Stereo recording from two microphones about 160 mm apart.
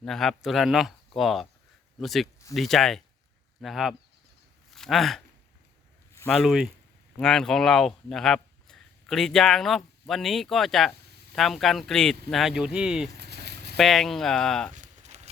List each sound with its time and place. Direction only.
0.0 s speech: centre (ahead or behind)
6.2 s speech: centre (ahead or behind)
13.1 s a sound: 90° right
13.7 s speech: centre (ahead or behind)
14.7 s walk: 45° right (ahead or behind)